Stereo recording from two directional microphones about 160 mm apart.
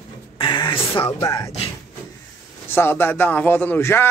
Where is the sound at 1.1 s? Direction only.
20° left (ahead or behind).